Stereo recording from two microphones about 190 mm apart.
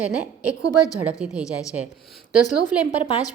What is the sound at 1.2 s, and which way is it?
Speech, 5° right (ahead or behind).